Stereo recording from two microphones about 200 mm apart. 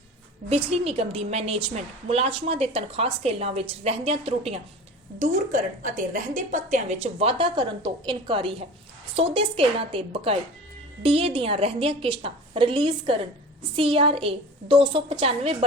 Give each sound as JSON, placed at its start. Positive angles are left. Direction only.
{"t": 0.5, "sound": "a woman's voice", "side_deg": -30}
{"t": 5.2, "sound": "a woman's voice", "side_deg": -40}